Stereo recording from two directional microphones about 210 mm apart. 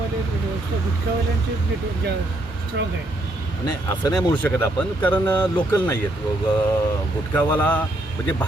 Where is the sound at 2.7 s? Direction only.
55° right (ahead or behind).